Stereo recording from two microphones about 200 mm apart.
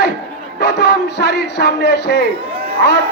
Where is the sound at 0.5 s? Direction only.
55° left (ahead or behind).